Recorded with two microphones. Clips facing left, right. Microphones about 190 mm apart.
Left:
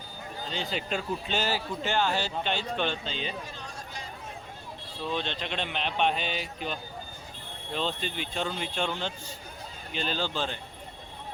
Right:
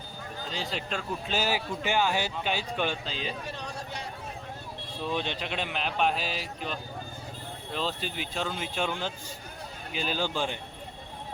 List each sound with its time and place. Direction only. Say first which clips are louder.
0.5 s speech: left 2 dB; centre (ahead or behind)
1.4 s a man's voice: right 4 dB; 10° right (ahead or behind)
3.4 s a sound: right 4 dB; 65° right (ahead or behind)
5.1 s a man's voice: even; 10° right (ahead or behind)